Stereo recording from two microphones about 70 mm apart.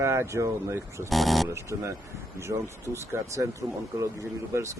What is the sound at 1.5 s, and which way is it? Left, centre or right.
Speech, right.